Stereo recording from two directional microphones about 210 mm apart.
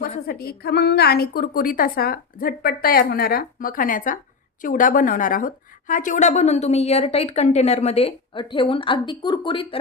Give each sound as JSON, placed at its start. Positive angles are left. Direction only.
{"t": 0.0, "sound": "a woman's voice", "side_deg": 45}